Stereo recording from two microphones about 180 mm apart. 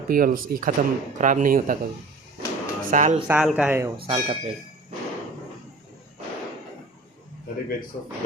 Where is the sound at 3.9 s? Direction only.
30° right (ahead or behind).